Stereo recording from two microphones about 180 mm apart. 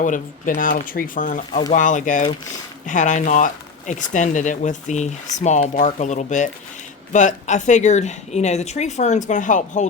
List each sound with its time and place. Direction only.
0.0 s speech: 45° left (ahead or behind)